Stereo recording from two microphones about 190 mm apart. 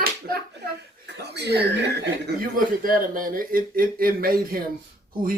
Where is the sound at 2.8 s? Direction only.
50° right (ahead or behind).